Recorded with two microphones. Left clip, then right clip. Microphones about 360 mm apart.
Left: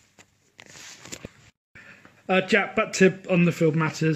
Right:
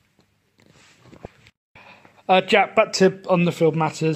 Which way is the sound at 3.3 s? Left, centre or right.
Right.